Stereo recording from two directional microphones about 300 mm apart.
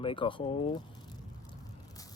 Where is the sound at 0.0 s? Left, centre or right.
Centre.